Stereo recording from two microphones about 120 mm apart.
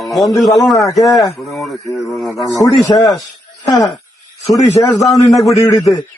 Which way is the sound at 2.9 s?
35° left (ahead or behind).